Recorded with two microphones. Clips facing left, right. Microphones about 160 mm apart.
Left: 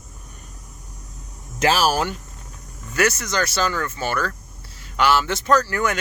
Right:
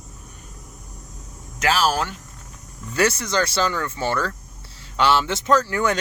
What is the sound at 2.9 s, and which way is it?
Speech, 30° right (ahead or behind).